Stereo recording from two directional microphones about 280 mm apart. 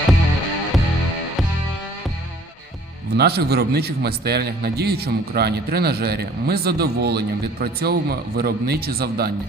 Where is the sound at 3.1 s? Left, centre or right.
Right.